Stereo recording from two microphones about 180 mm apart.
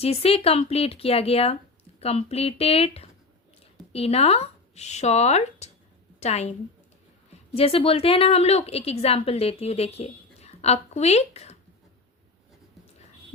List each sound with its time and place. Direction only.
0.0 s a woman's voice: 35° left (ahead or behind)
7.5 s a woman's voice: 30° left (ahead or behind)